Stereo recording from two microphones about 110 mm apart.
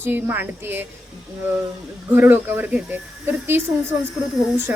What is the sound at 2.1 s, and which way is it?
A woman's voice, 15° right (ahead or behind).